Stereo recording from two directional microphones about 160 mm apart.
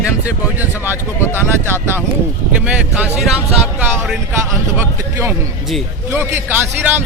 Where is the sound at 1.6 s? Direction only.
15° right (ahead or behind).